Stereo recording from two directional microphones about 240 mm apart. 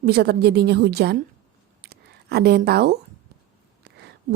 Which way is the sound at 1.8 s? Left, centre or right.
Right.